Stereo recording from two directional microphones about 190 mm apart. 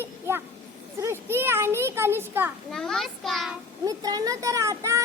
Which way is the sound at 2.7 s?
Centre (ahead or behind).